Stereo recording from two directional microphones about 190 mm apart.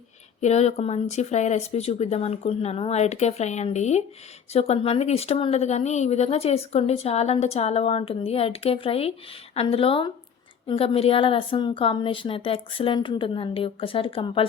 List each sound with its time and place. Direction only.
0.4 s a woman's voice: 35° left (ahead or behind)